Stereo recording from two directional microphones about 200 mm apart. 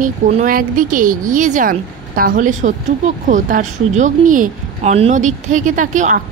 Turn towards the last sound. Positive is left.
turn(degrees=-40)  # may be behind; listen again after turning